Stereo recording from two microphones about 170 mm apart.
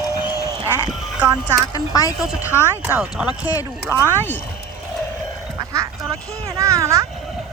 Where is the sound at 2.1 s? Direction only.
5° right (ahead or behind).